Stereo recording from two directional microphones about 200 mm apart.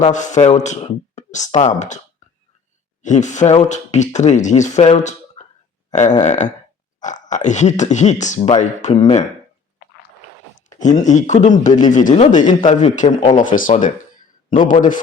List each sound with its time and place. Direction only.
0.0 s speech: 35° left (ahead or behind)
3.0 s speech: 35° left (ahead or behind)
5.9 s a sound: 35° left (ahead or behind)
6.2 s speech: 35° left (ahead or behind)
10.7 s speech: 40° left (ahead or behind)